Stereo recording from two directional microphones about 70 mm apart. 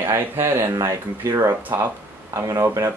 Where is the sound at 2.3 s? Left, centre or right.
Right.